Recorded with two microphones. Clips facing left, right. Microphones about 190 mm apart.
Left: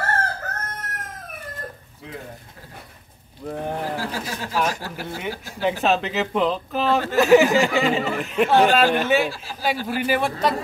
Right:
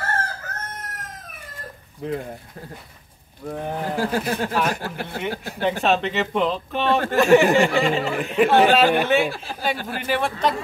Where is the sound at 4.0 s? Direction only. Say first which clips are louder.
Right 6 dB; 55° right (ahead or behind).